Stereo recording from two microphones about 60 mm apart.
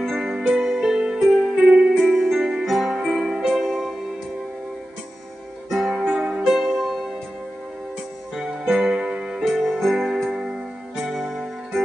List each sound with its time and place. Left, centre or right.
0.0 s music: centre
1.6 s music: right
2.1 s music: centre
5.7 s music: centre
8.4 s music: centre
9.4 s music: centre